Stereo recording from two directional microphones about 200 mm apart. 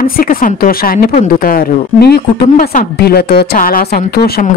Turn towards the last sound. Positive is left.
turn(degrees=50)  # may be behind; listen again after turning